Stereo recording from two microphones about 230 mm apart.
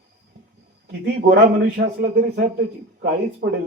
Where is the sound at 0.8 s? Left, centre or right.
Right.